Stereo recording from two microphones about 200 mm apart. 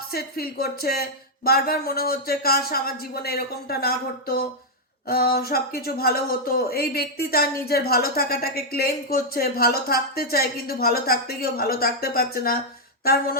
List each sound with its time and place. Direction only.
0.1 s speech: 50° left (ahead or behind)